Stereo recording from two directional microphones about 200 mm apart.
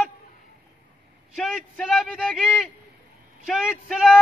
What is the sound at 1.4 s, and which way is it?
A man's voice, centre (ahead or behind).